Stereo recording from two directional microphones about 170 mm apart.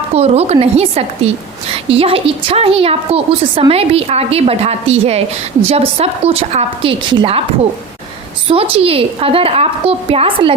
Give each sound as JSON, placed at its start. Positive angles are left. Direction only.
{"t": 0.1, "sound": "a woman's voice", "side_deg": -40}
{"t": 8.4, "sound": "a woman's voice", "side_deg": -35}